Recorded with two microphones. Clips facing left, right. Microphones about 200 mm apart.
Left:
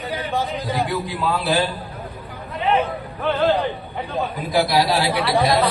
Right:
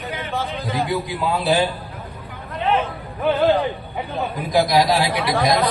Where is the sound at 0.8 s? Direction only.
20° right (ahead or behind).